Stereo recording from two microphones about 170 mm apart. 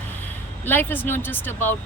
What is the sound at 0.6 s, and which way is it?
Speech, 10° left (ahead or behind).